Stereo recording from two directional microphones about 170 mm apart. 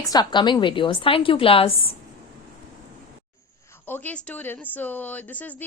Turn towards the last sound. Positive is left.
turn(degrees=10)  # may be behind; listen again after turning